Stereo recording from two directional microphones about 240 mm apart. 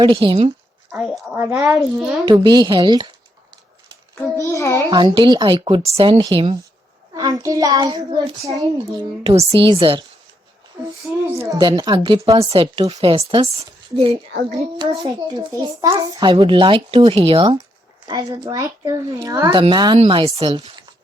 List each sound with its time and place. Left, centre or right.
0.0 s a child's voice: right
0.9 s a woman's voice: centre
1.4 s a child's voice: centre
1.8 s a child's voice: centre
2.2 s a child's voice: centre
4.1 s a sound: centre
4.9 s a child's voice: centre
11.3 s a child's voice: centre
15.0 s a child's voice: centre